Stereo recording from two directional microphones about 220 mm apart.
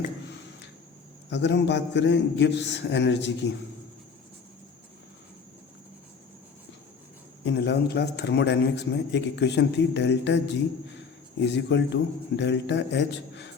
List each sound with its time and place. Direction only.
1.3 s a man's voice: 50° left (ahead or behind)
7.4 s a man's voice: 50° left (ahead or behind)